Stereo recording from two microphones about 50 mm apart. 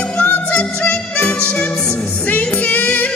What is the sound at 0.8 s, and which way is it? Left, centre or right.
Music, left.